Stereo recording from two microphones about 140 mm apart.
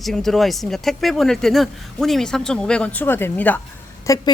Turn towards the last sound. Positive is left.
turn(degrees=25)  # may be behind; listen again after turning